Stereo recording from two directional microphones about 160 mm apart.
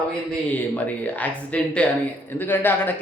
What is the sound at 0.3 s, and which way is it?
Speech, 10° left (ahead or behind).